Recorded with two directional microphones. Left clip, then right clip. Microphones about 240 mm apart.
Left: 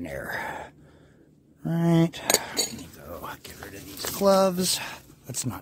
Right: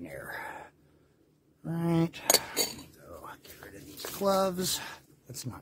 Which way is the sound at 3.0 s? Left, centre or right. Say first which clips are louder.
Left 8 dB; left.